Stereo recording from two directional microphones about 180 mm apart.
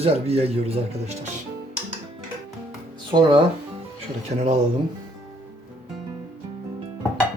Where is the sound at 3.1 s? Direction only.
25° right (ahead or behind).